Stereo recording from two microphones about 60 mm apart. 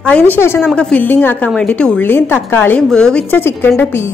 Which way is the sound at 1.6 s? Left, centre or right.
Centre.